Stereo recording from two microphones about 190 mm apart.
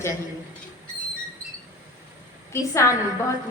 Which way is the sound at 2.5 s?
15° left (ahead or behind).